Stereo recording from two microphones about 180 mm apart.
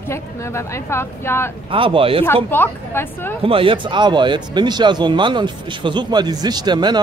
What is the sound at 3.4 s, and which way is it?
Speech, 30° right (ahead or behind).